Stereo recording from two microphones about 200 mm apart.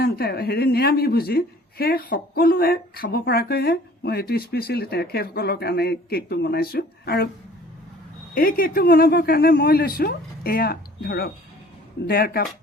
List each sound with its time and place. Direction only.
0.0 s speech: 50° left (ahead or behind)
8.4 s speech: 45° left (ahead or behind)